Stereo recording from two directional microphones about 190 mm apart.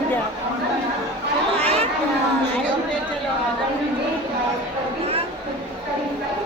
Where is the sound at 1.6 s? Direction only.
35° right (ahead or behind).